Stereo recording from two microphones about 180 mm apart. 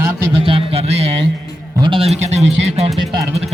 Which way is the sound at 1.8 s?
30° right (ahead or behind).